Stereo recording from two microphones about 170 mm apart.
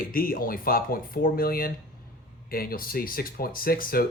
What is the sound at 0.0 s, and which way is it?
Speech, 60° left (ahead or behind).